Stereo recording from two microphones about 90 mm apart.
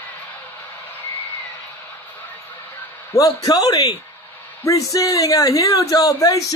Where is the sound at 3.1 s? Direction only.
40° left (ahead or behind).